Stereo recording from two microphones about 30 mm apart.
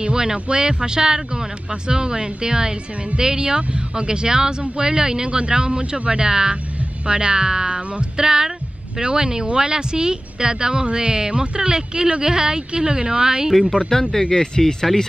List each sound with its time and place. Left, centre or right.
0.0 s a woman's voice: right
8.2 s a woman's voice: right
13.5 s speech: centre
14.3 s speech: left
14.9 s speech: centre